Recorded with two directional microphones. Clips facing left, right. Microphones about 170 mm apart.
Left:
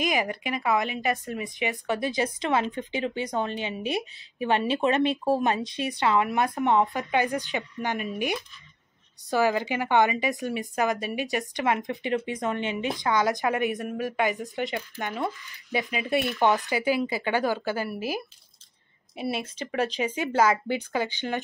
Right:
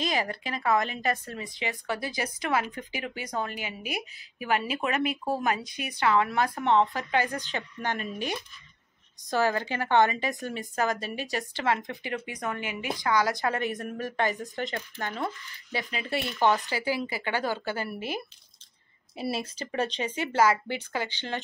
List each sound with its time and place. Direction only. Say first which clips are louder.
0.0 s a woman's voice: left 3 dB; 15° left (ahead or behind)
9.3 s a woman's voice: left 3 dB; 15° left (ahead or behind)
19.4 s speech: left 2 dB; centre (ahead or behind)
20.2 s a woman's voice: left 1 dB; 20° left (ahead or behind)